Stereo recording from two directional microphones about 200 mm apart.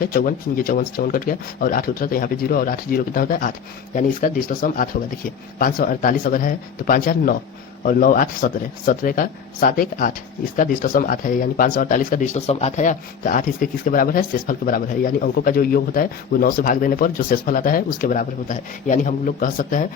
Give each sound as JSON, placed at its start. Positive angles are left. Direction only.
{"t": 0.0, "sound": "speech", "side_deg": 45}